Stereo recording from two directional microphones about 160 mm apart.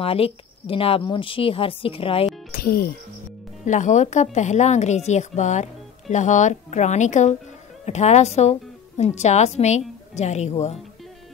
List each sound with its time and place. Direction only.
0.0 s speech: 35° left (ahead or behind)
2.5 s speech: 70° left (ahead or behind)
3.6 s a woman's voice: 50° left (ahead or behind)